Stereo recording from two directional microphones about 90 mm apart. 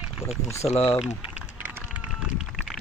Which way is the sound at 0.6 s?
90° left.